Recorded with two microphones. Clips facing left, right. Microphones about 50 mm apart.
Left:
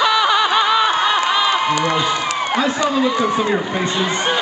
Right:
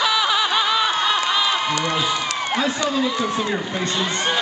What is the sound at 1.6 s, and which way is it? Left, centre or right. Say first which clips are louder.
Speech: left 5 dB; centre.